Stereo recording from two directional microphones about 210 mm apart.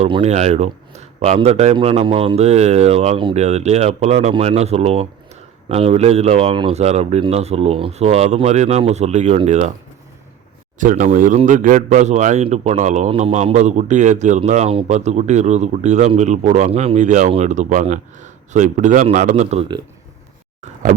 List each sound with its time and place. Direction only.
0.0 s a man's voice: 30° right (ahead or behind)
10.8 s a man's voice: 40° right (ahead or behind)